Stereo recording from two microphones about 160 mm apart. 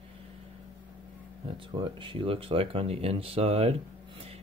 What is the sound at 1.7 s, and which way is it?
Speech, 30° right (ahead or behind).